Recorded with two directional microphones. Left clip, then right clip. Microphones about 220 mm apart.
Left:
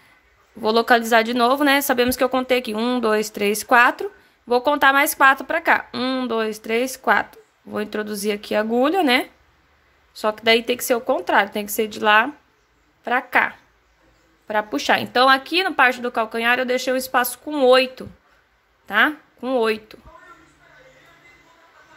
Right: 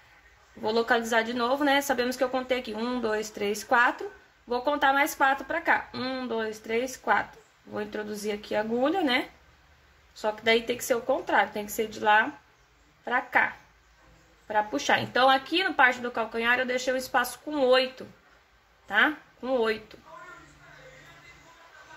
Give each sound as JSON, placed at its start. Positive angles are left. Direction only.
{"t": 0.6, "sound": "a woman's voice", "side_deg": 40}
{"t": 14.5, "sound": "a woman's voice", "side_deg": 40}